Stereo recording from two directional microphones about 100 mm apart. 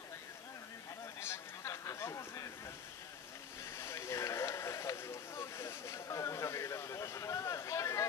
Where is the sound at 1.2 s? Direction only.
30° left (ahead or behind).